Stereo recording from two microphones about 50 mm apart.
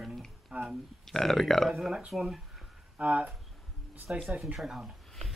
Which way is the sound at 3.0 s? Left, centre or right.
Right.